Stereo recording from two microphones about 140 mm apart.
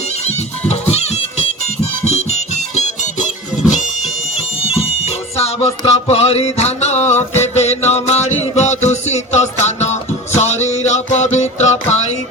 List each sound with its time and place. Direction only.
0.1 s music: 50° left (ahead or behind)
4.7 s music: 45° left (ahead or behind)